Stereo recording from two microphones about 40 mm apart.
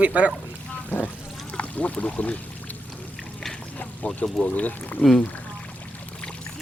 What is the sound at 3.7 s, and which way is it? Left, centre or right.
Duck, left.